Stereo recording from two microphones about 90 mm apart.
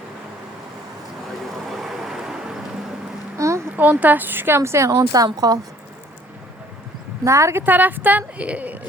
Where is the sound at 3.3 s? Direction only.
35° right (ahead or behind).